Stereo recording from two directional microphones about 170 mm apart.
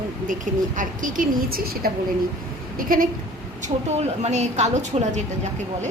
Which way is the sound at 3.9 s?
40° right (ahead or behind).